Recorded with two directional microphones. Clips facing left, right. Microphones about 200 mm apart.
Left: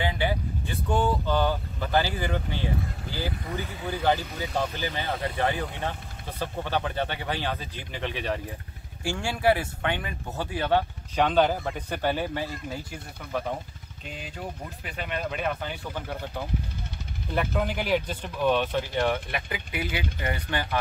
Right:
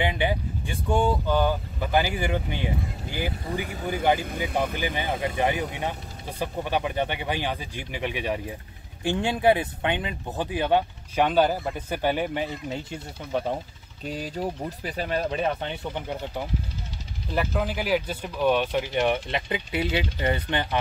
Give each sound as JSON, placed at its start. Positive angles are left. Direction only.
{"t": 0.0, "sound": "speech", "side_deg": -20}
{"t": 4.5, "sound": "speech", "side_deg": -55}
{"t": 4.7, "sound": "speech", "side_deg": -15}
{"t": 17.3, "sound": "speech", "side_deg": -5}